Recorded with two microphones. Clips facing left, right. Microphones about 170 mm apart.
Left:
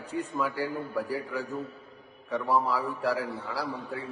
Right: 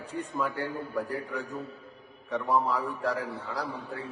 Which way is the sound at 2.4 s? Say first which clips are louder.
Even; centre (ahead or behind).